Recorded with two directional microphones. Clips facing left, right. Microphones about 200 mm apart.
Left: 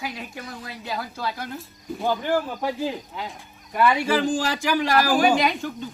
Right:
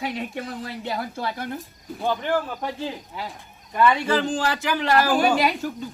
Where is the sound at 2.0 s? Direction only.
10° left (ahead or behind).